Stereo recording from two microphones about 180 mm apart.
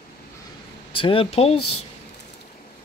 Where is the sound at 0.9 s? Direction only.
30° left (ahead or behind).